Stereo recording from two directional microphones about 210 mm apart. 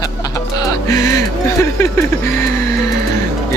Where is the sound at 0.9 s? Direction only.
15° left (ahead or behind).